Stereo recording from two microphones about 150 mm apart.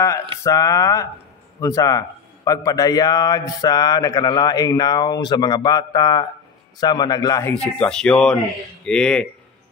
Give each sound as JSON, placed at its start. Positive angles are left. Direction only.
{"t": 0.4, "sound": "a man's voice", "side_deg": 20}
{"t": 7.5, "sound": "speech", "side_deg": 5}